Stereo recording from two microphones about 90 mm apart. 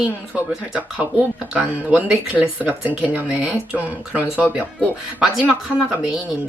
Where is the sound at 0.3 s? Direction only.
15° right (ahead or behind).